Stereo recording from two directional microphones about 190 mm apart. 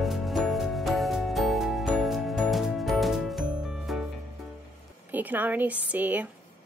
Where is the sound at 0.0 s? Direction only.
Centre (ahead or behind).